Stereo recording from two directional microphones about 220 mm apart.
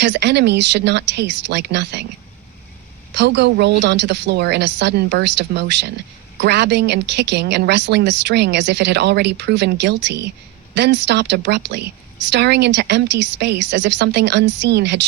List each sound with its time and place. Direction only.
0.0 s a woman's voice: 50° right (ahead or behind)
3.2 s a woman's voice: 50° right (ahead or behind)